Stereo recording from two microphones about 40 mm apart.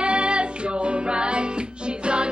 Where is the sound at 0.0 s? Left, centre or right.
Right.